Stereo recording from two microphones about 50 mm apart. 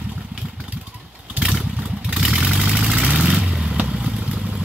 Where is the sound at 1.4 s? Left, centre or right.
Centre.